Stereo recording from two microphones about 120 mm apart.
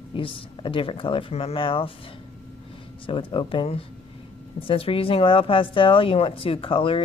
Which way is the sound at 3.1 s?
45° left (ahead or behind).